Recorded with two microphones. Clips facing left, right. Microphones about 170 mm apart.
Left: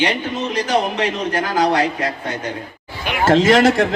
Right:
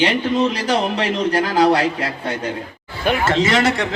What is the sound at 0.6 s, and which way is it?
Speech, 35° right (ahead or behind).